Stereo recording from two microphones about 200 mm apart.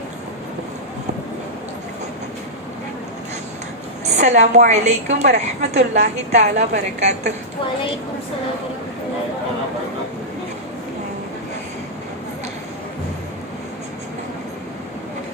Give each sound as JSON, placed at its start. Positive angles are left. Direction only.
{"t": 4.1, "sound": "a woman's voice", "side_deg": -35}